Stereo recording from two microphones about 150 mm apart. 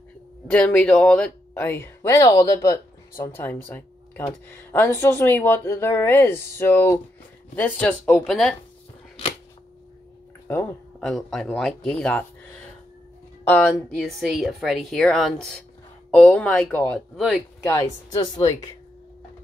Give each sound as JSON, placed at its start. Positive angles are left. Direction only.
{"t": 0.5, "sound": "speech", "side_deg": 10}
{"t": 3.3, "sound": "speech", "side_deg": 15}
{"t": 11.0, "sound": "speech", "side_deg": 0}
{"t": 13.5, "sound": "speech", "side_deg": 10}
{"t": 17.6, "sound": "a woman's voice", "side_deg": 20}